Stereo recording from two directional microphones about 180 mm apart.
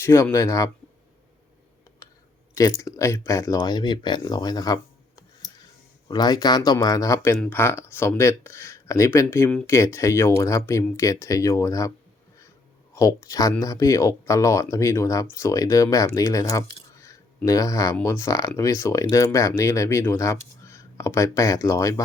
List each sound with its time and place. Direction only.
0.0 s speech: 15° left (ahead or behind)
2.8 s speech: 15° left (ahead or behind)
12.9 s speech: 15° left (ahead or behind)